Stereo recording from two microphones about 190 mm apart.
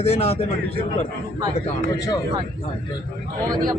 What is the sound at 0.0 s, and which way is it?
Speech, 30° left (ahead or behind).